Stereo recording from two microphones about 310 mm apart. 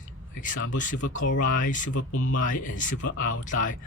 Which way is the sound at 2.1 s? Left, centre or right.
Left.